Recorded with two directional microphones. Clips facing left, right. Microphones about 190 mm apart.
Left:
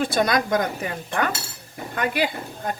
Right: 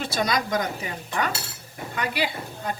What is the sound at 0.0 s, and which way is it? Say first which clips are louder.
Speech: left 4 dB; 50° left (ahead or behind).